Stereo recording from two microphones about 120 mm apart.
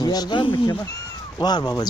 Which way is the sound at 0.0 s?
35° left (ahead or behind).